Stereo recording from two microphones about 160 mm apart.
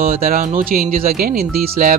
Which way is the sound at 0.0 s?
65° right (ahead or behind).